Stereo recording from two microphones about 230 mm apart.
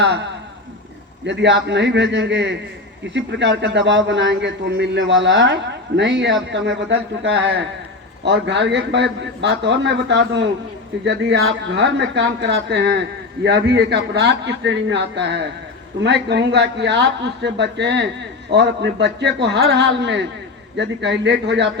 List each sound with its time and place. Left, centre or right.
1.2 s a man's voice: right